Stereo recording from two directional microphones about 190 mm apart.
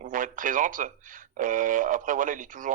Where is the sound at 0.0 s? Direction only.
45° right (ahead or behind).